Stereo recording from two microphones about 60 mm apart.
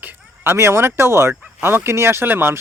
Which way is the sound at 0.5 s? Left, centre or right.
Right.